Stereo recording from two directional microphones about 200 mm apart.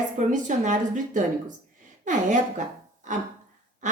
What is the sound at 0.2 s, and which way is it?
A woman's voice, 40° right (ahead or behind).